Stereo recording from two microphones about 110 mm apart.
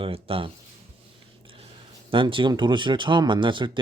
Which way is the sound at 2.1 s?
50° right (ahead or behind).